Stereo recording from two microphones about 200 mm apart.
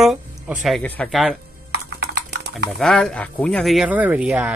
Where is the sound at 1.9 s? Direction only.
55° right (ahead or behind).